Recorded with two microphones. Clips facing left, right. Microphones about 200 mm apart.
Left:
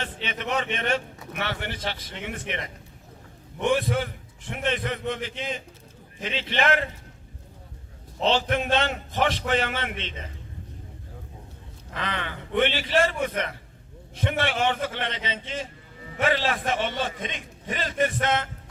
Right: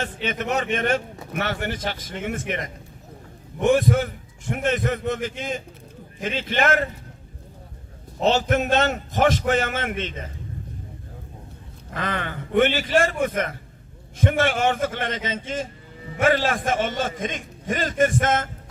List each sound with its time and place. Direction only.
0.0 s a man's voice: 45° right (ahead or behind)
8.2 s a man's voice: 45° right (ahead or behind)
11.9 s a man's voice: 45° right (ahead or behind)